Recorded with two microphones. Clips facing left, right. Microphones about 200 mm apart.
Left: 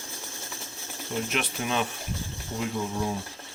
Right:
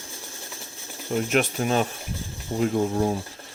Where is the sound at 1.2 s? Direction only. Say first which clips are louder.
Right 9 dB; 45° right (ahead or behind).